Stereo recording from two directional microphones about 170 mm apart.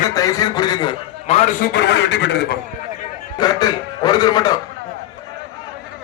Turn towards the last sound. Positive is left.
turn(degrees=25)  # may be behind; listen again after turning